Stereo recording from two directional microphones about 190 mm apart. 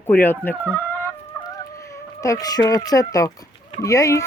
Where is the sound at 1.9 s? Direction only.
15° left (ahead or behind).